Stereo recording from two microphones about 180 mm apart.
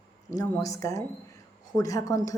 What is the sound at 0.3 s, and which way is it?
A woman's voice, 15° left (ahead or behind).